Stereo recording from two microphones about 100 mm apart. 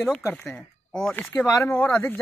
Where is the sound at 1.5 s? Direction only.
30° left (ahead or behind).